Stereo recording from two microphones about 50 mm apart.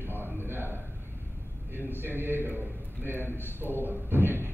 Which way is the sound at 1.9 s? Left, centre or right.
Right.